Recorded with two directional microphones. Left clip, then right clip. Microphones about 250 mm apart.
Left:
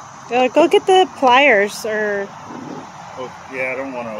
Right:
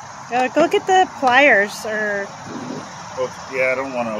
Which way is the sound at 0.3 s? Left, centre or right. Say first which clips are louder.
Left 3 dB; left.